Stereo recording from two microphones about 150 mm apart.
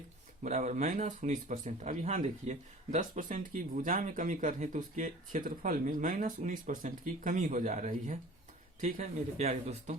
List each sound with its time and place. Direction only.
0.4 s speech: 55° right (ahead or behind)